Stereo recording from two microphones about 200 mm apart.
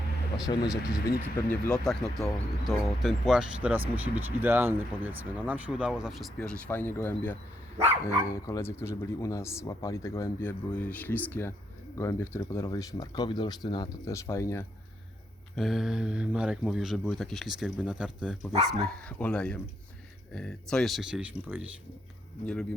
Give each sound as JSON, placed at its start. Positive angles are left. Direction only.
{"t": 0.5, "sound": "speech", "side_deg": 25}
{"t": 1.0, "sound": "speech", "side_deg": 50}
{"t": 1.6, "sound": "speech", "side_deg": 5}
{"t": 15.5, "sound": "speech", "side_deg": 0}